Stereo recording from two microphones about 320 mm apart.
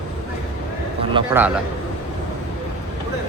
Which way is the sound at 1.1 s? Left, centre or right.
Centre.